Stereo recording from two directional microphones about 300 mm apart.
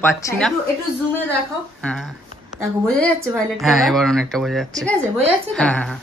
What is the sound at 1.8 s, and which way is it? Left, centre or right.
Speech, centre.